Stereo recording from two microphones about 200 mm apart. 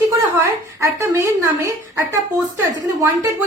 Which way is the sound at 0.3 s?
15° right (ahead or behind).